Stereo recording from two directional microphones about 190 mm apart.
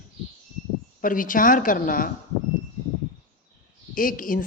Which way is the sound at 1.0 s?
45° left (ahead or behind).